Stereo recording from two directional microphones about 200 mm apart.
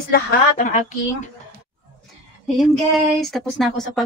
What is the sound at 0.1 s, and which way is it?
A woman's voice, 40° left (ahead or behind).